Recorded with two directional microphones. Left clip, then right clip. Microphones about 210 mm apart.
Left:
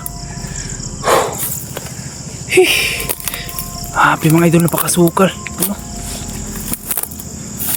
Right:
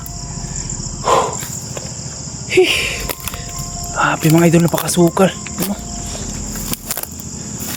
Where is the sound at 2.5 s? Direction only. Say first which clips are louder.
Left 2 dB; 10° left (ahead or behind).